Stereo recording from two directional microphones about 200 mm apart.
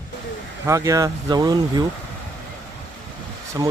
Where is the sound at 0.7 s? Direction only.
15° right (ahead or behind).